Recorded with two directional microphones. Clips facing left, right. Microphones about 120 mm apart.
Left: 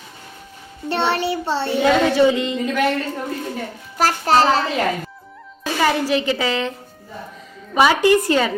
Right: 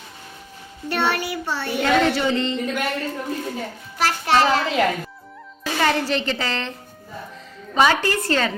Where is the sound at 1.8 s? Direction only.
10° left (ahead or behind).